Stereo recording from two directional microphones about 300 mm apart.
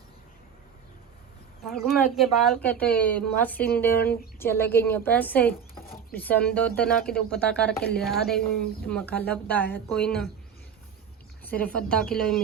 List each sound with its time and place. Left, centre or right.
1.6 s a woman's voice: centre
7.7 s a woman's voice: left
7.9 s speech: centre
11.4 s speech: centre